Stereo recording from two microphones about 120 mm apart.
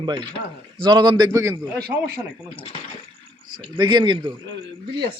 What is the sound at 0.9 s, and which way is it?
Speech, 35° right (ahead or behind).